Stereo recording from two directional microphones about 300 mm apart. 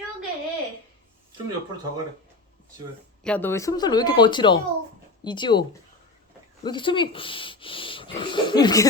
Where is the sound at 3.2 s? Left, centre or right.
Centre.